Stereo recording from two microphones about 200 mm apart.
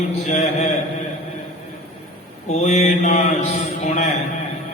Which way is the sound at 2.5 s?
35° left (ahead or behind).